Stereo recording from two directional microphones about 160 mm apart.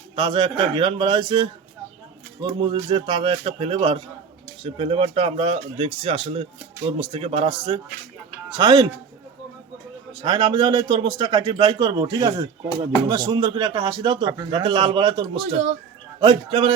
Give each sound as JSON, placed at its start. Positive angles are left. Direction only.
{"t": 0.2, "sound": "speech", "side_deg": -30}
{"t": 2.6, "sound": "speech", "side_deg": -30}
{"t": 10.1, "sound": "speech", "side_deg": -30}
{"t": 12.6, "sound": "speech", "side_deg": 25}
{"t": 13.1, "sound": "speech", "side_deg": -25}